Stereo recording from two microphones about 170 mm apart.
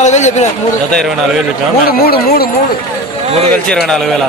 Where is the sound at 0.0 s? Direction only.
45° left (ahead or behind).